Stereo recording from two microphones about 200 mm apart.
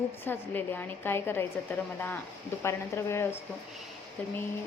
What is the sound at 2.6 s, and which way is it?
Speech, 15° left (ahead or behind).